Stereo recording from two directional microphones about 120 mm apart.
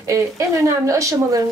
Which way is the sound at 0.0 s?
25° right (ahead or behind).